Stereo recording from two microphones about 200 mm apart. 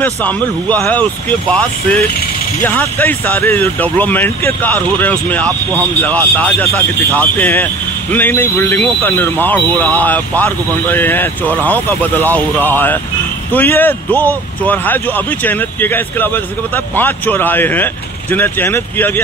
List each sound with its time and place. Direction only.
0.0 s speech: 5° left (ahead or behind)